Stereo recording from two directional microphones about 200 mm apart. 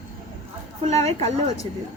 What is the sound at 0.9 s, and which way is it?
Speech, 35° right (ahead or behind).